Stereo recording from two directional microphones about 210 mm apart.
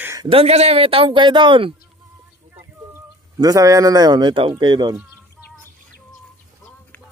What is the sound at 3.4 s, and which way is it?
Speech, 15° right (ahead or behind).